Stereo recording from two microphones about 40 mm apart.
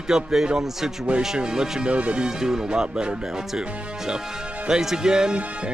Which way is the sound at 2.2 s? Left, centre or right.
Centre.